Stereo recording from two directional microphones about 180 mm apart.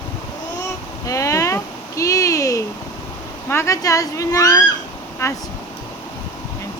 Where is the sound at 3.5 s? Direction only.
15° left (ahead or behind).